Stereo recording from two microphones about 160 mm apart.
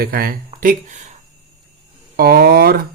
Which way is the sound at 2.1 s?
70° right (ahead or behind).